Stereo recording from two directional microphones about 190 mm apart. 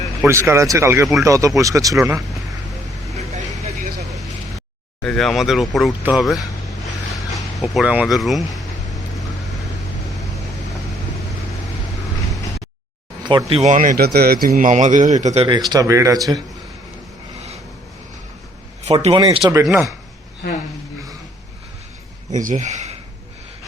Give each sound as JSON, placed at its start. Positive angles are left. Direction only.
{"t": 0.3, "sound": "speech", "side_deg": -15}
{"t": 5.0, "sound": "speech", "side_deg": 0}
{"t": 13.5, "sound": "speech", "side_deg": -35}
{"t": 15.7, "sound": "speech", "side_deg": -15}
{"t": 18.8, "sound": "speech", "side_deg": -35}
{"t": 19.6, "sound": "speech", "side_deg": 0}
{"t": 22.3, "sound": "speech", "side_deg": -40}